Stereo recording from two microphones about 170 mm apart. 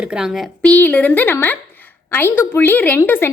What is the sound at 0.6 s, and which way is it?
A woman's voice, 10° left (ahead or behind).